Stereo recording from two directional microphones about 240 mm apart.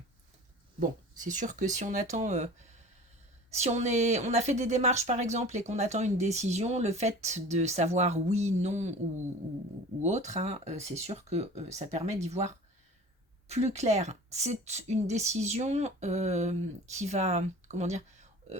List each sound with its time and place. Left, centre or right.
0.8 s speech: right
3.5 s speech: right
13.5 s speech: right